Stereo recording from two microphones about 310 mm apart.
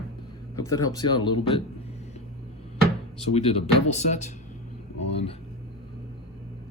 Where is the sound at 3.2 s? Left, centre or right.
Centre.